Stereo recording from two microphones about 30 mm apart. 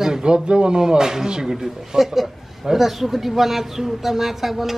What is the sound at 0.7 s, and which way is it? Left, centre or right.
A man's voice, centre.